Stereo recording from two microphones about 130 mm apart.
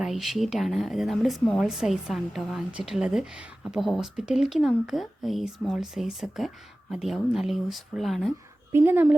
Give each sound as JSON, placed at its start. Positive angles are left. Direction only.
{"t": 0.0, "sound": "speech", "side_deg": 0}
{"t": 8.7, "sound": "speech", "side_deg": -20}